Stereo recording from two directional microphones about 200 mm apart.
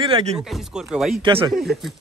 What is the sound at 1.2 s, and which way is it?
Speech, 25° right (ahead or behind).